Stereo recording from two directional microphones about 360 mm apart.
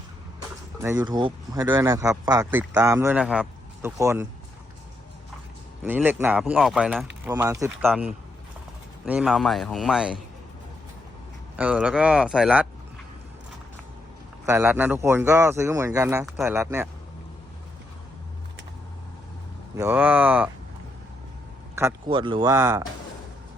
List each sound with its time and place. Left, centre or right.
0.8 s speech: centre
5.8 s speech: centre
11.5 s speech: centre
14.4 s speech: centre
19.7 s speech: centre
21.8 s speech: centre